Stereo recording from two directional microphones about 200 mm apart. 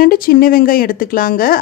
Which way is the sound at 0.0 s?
45° left (ahead or behind).